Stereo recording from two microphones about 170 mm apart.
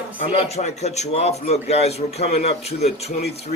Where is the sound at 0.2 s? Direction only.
35° left (ahead or behind).